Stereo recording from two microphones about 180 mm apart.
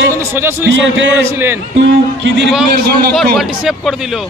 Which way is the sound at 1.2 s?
15° right (ahead or behind).